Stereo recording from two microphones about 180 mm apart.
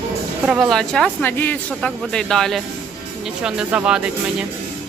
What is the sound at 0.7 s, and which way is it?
Speech, 5° left (ahead or behind).